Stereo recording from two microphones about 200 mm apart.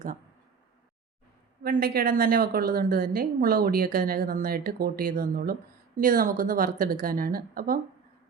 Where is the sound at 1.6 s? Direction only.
45° right (ahead or behind).